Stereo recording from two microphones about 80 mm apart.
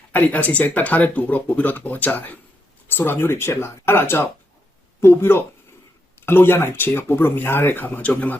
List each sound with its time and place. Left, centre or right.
0.1 s speech: centre